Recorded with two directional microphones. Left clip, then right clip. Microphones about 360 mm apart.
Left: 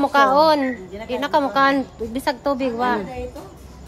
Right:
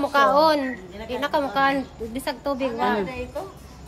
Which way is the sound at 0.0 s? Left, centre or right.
Centre.